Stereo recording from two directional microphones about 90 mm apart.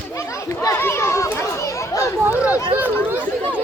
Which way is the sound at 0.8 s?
30° left (ahead or behind).